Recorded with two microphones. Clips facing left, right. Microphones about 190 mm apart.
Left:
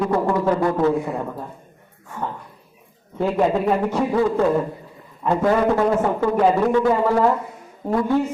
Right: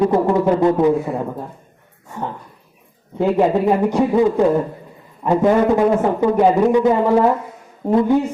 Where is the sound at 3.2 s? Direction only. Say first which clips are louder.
Right 4 dB; 15° right (ahead or behind).